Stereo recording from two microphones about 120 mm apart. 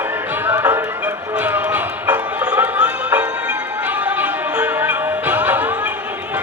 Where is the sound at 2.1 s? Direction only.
10° right (ahead or behind).